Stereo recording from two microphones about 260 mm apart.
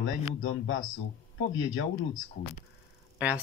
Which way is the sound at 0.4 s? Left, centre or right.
Left.